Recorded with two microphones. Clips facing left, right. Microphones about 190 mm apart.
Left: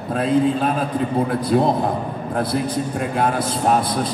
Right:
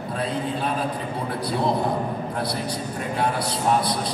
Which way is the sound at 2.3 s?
50° left (ahead or behind).